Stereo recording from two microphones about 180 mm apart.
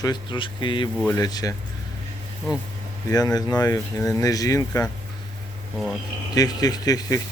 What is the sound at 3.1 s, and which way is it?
Speech, 20° left (ahead or behind).